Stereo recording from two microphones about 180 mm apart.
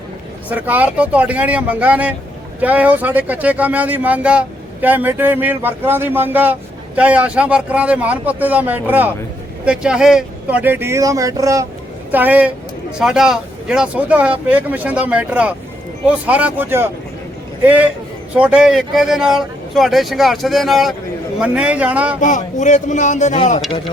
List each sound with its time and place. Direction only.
0.5 s speech: 10° right (ahead or behind)
22.2 s speech: 45° left (ahead or behind)